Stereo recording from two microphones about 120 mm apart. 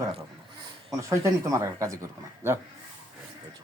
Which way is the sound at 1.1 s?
25° right (ahead or behind).